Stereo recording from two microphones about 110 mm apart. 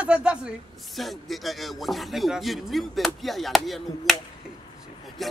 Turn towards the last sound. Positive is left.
turn(degrees=0)  # may be behind; listen again after turning